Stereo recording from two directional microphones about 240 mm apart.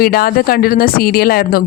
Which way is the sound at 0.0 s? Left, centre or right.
Left.